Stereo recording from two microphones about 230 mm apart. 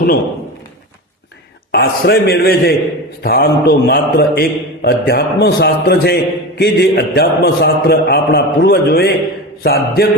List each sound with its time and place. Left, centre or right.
1.7 s mantra: left